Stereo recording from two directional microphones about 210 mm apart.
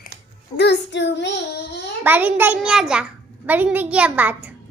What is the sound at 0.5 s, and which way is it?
Child singing, 55° left (ahead or behind).